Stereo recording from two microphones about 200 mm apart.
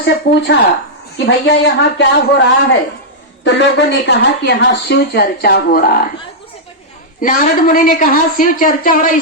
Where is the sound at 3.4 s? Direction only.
60° left (ahead or behind); by 6.1 s 45° left (ahead or behind).